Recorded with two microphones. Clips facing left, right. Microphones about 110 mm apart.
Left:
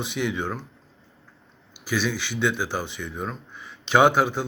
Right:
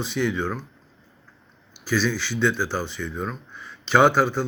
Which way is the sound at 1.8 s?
15° left (ahead or behind).